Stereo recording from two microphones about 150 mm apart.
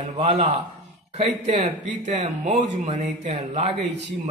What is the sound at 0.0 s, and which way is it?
A man's voice, 45° right (ahead or behind).